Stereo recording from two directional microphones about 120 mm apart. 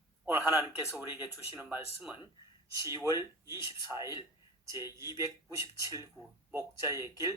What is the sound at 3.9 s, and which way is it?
Speech, 5° right (ahead or behind).